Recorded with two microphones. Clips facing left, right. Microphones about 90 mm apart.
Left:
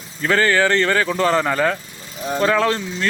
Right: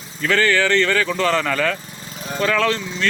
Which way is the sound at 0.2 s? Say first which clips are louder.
Left 1 dB; 30° left (ahead or behind).